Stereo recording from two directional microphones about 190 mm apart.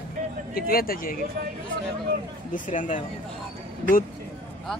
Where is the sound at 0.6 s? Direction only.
50° left (ahead or behind).